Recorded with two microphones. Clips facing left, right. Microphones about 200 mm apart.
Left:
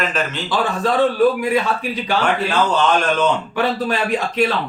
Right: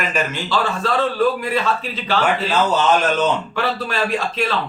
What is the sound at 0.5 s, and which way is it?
Speech, 15° left (ahead or behind).